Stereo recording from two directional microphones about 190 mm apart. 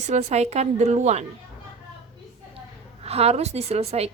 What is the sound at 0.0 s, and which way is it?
Speech, 35° right (ahead or behind).